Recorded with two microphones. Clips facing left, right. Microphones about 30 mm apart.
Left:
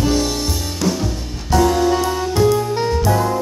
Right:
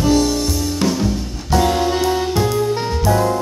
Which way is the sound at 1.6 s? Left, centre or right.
Right.